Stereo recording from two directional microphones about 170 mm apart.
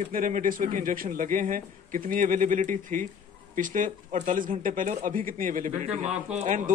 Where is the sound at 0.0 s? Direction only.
50° right (ahead or behind).